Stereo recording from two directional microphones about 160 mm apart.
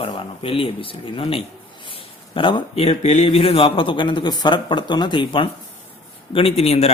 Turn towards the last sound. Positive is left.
turn(degrees=40)  # may be behind; listen again after turning